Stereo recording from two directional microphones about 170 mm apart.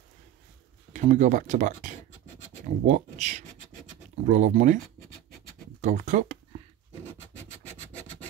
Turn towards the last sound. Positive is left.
turn(degrees=-45)  # may be behind; listen again after turning